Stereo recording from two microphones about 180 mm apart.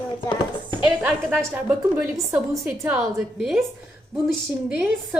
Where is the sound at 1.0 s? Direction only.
10° right (ahead or behind).